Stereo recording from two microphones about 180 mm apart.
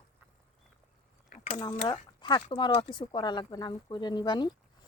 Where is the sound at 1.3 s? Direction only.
40° left (ahead or behind).